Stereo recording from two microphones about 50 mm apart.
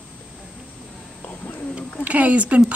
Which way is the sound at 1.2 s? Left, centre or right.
Left.